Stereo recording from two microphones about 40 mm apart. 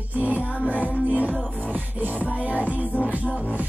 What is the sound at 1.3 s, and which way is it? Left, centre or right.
Music, centre.